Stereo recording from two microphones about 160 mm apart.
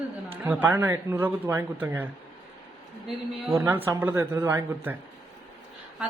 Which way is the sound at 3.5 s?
15° right (ahead or behind).